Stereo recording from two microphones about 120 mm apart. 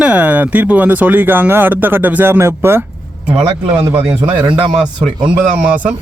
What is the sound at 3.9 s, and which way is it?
Speech, 15° right (ahead or behind).